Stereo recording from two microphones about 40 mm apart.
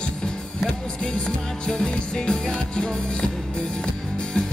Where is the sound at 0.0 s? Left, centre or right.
Left.